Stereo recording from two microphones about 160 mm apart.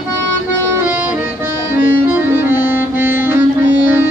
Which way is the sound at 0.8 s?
10° right (ahead or behind).